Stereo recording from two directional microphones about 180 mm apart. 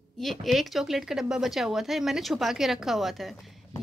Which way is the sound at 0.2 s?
Centre (ahead or behind).